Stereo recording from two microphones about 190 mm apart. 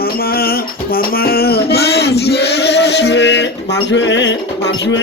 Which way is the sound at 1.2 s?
55° left (ahead or behind).